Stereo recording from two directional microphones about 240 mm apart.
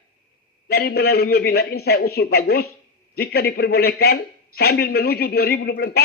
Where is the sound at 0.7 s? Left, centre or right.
Left.